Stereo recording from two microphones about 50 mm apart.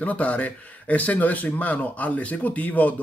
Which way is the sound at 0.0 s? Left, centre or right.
Left.